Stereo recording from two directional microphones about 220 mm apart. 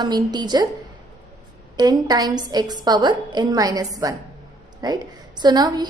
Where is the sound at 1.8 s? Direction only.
20° right (ahead or behind).